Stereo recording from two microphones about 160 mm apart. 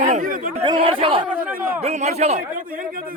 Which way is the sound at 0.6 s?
35° right (ahead or behind).